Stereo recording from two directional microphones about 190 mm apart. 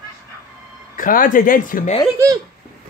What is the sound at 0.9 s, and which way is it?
Speech, 45° left (ahead or behind).